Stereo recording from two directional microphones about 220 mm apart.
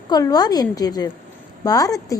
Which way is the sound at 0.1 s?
15° left (ahead or behind).